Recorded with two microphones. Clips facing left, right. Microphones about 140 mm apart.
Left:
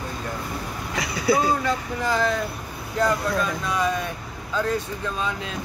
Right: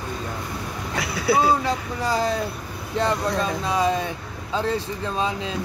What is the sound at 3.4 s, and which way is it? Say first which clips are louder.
Speech: right 2 dB; 30° right (ahead or behind).